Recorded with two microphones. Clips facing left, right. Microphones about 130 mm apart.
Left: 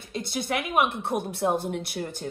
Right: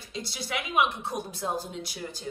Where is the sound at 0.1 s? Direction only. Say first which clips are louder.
Left 6 dB; 55° left (ahead or behind).